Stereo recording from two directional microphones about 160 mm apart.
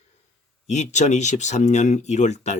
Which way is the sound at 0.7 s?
45° left (ahead or behind).